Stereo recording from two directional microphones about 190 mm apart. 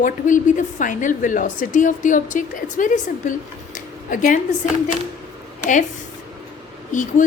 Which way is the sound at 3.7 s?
45° left (ahead or behind).